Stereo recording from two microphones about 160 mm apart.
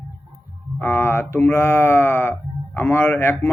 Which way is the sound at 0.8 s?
15° left (ahead or behind).